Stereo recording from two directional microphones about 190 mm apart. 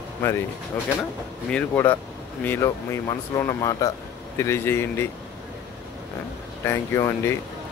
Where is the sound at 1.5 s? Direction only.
10° left (ahead or behind).